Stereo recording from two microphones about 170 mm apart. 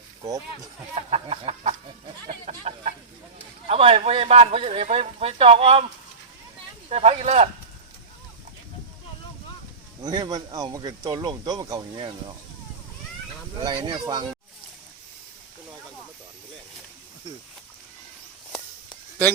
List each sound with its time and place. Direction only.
0.3 s speech: 20° right (ahead or behind)
0.9 s speech: 40° right (ahead or behind)
6.9 s speech: 40° right (ahead or behind)
10.0 s speech: 25° right (ahead or behind)
13.6 s speech: 30° right (ahead or behind)